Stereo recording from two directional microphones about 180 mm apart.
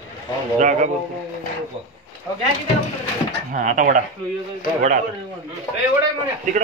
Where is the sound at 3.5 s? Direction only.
45° right (ahead or behind).